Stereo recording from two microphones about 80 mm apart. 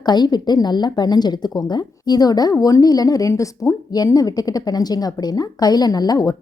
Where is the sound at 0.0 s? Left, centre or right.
Left.